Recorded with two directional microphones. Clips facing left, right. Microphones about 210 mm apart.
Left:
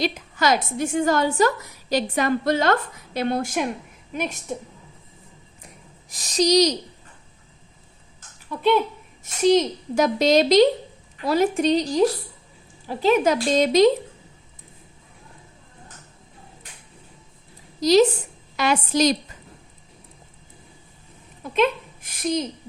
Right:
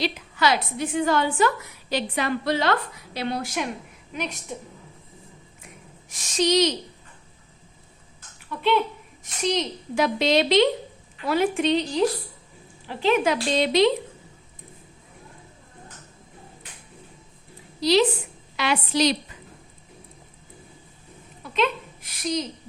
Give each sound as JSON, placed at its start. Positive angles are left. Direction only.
{"t": 0.0, "sound": "a woman's voice", "side_deg": 45}
{"t": 6.1, "sound": "speech", "side_deg": 35}
{"t": 9.2, "sound": "speech", "side_deg": 45}
{"t": 17.7, "sound": "a woman's voice", "side_deg": 45}
{"t": 21.5, "sound": "a child's voice", "side_deg": 50}